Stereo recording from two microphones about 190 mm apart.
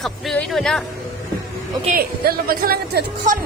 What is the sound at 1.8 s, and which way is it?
Speech, 50° right (ahead or behind).